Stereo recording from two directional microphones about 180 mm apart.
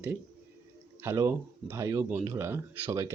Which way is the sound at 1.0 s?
15° right (ahead or behind).